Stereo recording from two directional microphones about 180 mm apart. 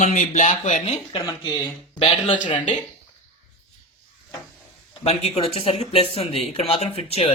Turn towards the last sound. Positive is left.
turn(degrees=35)  # may be behind; listen again after turning